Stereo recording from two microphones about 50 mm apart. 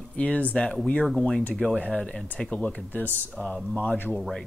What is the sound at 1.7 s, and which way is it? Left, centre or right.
Speech, left.